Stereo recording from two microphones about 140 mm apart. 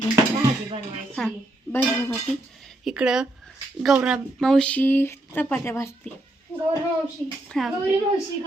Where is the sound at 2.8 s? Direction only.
5° right (ahead or behind); by 6.1 s 15° left (ahead or behind).